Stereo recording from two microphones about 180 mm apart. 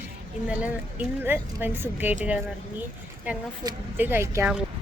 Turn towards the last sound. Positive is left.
turn(degrees=-15)  # may be behind; listen again after turning